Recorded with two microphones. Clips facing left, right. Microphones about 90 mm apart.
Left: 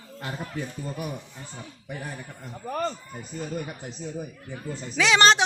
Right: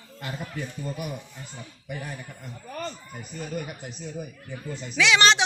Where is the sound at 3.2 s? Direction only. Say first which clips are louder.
Left 1 dB; 25° left (ahead or behind).